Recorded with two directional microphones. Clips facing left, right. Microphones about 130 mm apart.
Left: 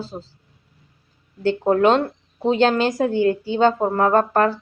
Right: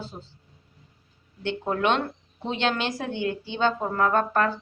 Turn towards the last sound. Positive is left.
turn(degrees=40)  # may be behind; listen again after turning